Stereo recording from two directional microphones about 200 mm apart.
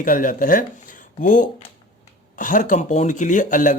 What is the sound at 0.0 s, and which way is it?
Speech, 45° left (ahead or behind).